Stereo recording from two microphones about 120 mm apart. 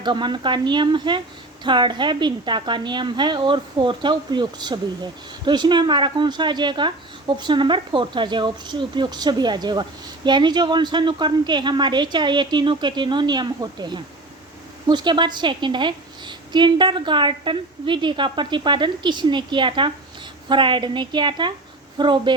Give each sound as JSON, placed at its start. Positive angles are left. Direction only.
{"t": 0.0, "sound": "a woman's voice", "side_deg": -40}